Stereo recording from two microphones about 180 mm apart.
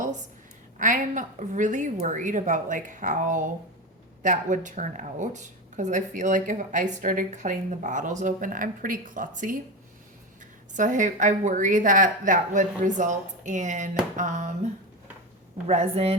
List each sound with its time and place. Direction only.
0.8 s speech: 45° right (ahead or behind)
10.8 s a woman's voice: 45° right (ahead or behind)